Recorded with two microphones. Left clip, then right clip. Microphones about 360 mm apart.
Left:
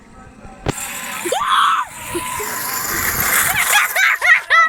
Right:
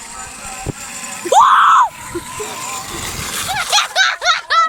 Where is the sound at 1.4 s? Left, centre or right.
Centre.